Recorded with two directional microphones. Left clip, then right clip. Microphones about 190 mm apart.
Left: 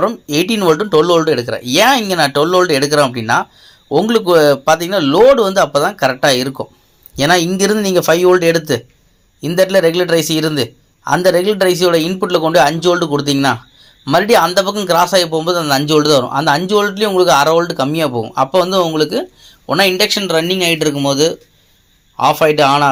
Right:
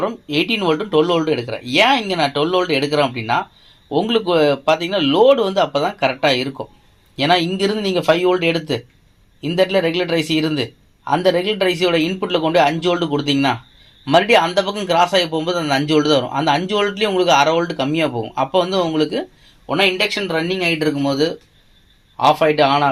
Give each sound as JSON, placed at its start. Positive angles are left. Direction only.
{"t": 0.0, "sound": "a man's voice", "side_deg": 40}
{"t": 19.6, "sound": "speech", "side_deg": 40}
{"t": 22.2, "sound": "speech", "side_deg": 30}